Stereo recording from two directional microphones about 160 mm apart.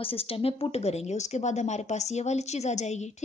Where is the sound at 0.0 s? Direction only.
35° left (ahead or behind).